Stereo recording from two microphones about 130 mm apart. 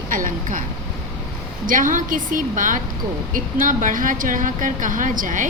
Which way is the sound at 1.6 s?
90° right.